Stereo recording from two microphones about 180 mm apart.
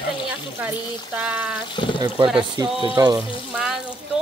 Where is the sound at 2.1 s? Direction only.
30° right (ahead or behind).